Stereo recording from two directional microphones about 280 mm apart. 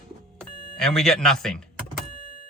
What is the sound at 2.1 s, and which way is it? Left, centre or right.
Vehicle, centre.